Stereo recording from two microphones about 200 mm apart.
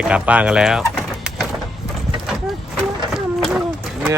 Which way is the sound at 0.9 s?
Centre (ahead or behind).